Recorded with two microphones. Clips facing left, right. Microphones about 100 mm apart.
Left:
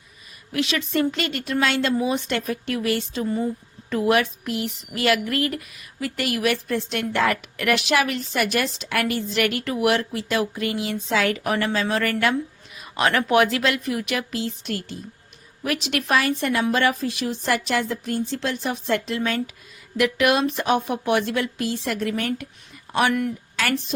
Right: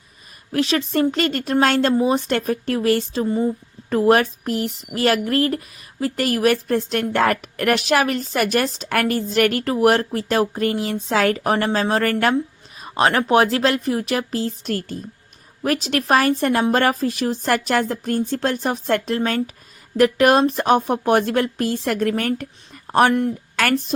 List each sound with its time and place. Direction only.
0.5 s speech: 35° right (ahead or behind)